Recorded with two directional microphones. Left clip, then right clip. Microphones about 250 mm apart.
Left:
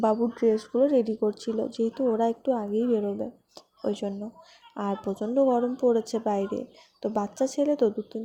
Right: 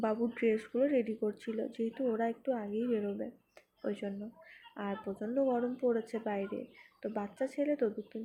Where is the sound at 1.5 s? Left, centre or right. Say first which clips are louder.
Left 9 dB; left.